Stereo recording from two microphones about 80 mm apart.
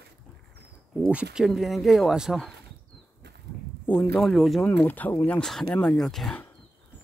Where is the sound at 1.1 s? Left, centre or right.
Centre.